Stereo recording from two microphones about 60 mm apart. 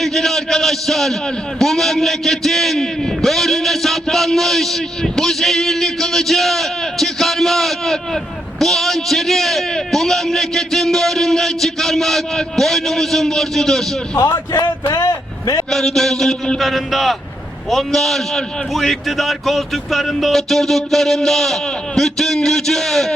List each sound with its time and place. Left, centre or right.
0.0 s a man's voice: centre
14.8 s speech: left
15.7 s a man's voice: centre